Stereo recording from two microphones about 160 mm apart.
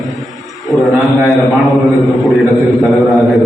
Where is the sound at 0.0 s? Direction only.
Centre (ahead or behind).